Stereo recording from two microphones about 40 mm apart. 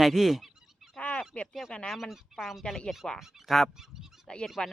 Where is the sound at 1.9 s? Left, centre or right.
Centre.